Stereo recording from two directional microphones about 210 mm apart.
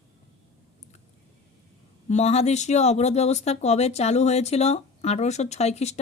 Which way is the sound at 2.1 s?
30° left (ahead or behind).